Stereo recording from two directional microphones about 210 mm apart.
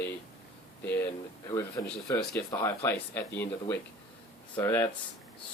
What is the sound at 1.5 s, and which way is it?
Speech, 15° left (ahead or behind).